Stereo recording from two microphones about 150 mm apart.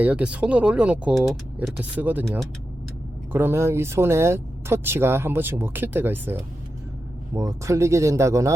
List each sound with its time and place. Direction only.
0.0 s speech: 10° right (ahead or behind)
3.3 s speech: 15° right (ahead or behind)